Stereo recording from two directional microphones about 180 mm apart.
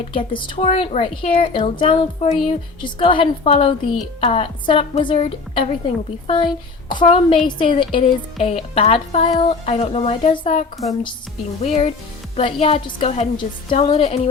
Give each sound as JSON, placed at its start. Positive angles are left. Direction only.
{"t": 0.1, "sound": "a woman's voice", "side_deg": 30}
{"t": 10.8, "sound": "a woman's voice", "side_deg": 0}
{"t": 11.6, "sound": "a woman's voice", "side_deg": 35}